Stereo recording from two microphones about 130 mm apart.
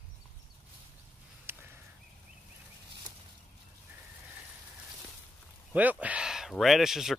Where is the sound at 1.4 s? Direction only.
20° right (ahead or behind).